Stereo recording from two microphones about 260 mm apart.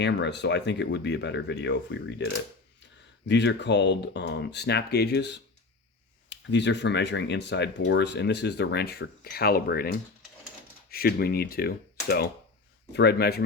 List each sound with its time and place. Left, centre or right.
0.0 s speech: left